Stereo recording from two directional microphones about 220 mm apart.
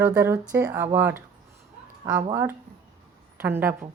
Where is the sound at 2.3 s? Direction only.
10° right (ahead or behind).